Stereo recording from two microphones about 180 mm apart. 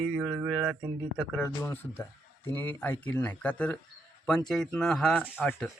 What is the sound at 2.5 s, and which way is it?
Speech, 10° left (ahead or behind).